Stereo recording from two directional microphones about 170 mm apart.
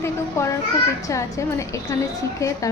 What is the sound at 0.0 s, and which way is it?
Children playing, 15° left (ahead or behind).